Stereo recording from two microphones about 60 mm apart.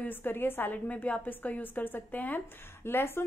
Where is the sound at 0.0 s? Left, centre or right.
Left.